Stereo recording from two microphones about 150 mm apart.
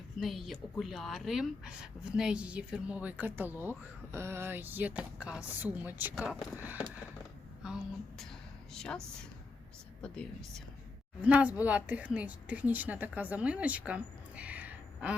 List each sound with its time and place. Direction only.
0.2 s a woman's voice: centre (ahead or behind)
10.0 s speech: 5° left (ahead or behind)
11.2 s a woman's voice: 10° right (ahead or behind)